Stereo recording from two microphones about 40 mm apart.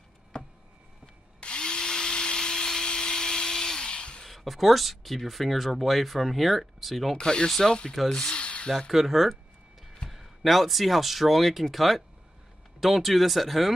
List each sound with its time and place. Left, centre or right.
0.3 s a sound: left
1.4 s drill: left
4.2 s speech: centre
7.2 s speech: centre
7.4 s speech: centre
8.1 s speech: left
8.9 s speech: centre